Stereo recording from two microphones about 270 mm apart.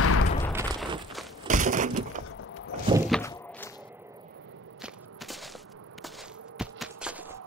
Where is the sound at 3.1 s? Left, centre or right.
Centre.